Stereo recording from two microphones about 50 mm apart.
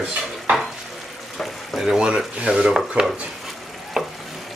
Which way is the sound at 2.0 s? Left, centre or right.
Centre.